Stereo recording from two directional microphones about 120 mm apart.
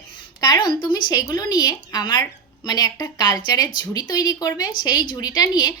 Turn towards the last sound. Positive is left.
turn(degrees=30)  # may be behind; listen again after turning